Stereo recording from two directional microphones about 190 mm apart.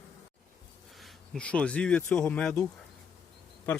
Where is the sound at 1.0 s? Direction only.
5° left (ahead or behind).